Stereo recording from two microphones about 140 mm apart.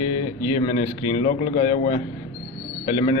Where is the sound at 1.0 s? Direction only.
35° left (ahead or behind).